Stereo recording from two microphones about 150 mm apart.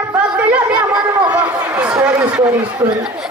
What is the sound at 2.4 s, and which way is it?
Speech, 25° right (ahead or behind).